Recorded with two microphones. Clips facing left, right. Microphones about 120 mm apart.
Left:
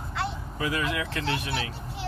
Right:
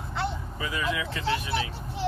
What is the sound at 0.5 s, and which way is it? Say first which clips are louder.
Speech: left 4 dB; 60° left (ahead or behind).